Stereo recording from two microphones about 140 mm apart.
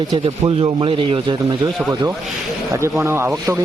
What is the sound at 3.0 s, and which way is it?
Speech, 15° right (ahead or behind).